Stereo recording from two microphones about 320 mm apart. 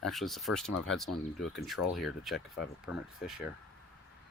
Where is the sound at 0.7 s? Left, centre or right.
Left.